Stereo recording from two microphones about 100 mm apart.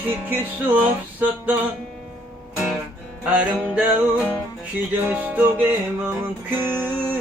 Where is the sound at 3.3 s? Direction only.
15° right (ahead or behind).